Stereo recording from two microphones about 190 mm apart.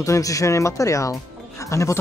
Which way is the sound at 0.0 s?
15° left (ahead or behind).